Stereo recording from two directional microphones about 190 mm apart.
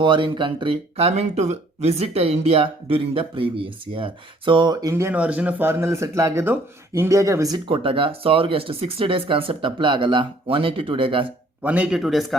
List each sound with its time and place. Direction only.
0.0 s speech: 25° right (ahead or behind)
11.6 s a man's voice: 5° right (ahead or behind)